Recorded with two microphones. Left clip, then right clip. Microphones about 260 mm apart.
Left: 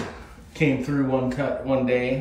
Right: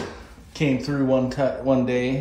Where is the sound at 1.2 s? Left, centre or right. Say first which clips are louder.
Right 3 dB; centre.